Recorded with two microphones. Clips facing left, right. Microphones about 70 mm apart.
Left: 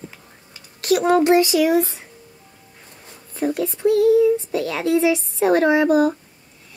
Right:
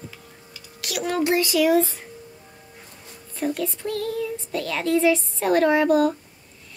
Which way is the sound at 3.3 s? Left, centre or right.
Left.